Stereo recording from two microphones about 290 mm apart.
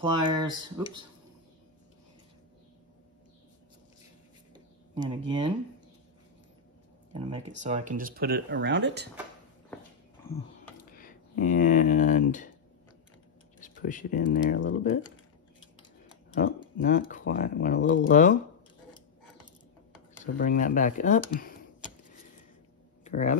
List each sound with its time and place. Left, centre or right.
0.0 s speech: centre
4.9 s speech: centre
7.1 s speech: centre; by 9.1 s right
10.3 s a sound: left
11.0 s speech: left
13.6 s speech: left
16.3 s speech: left
18.1 s speech: left
20.3 s speech: left
23.0 s a sound: left